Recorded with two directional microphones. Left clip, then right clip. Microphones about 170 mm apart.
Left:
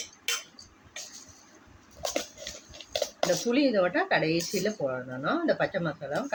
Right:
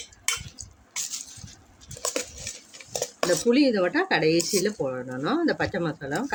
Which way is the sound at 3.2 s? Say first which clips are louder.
Right 5 dB; 90° right.